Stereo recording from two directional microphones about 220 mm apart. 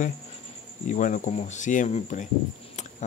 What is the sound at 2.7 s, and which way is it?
Cricket, 35° left (ahead or behind).